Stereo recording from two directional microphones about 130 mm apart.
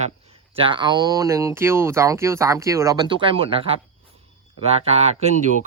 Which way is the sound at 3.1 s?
40° right (ahead or behind).